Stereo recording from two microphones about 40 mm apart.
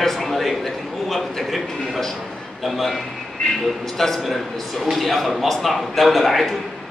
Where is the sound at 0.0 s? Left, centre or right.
Centre.